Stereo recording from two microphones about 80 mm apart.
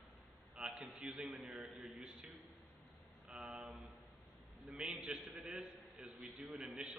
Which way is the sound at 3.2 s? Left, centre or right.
Centre.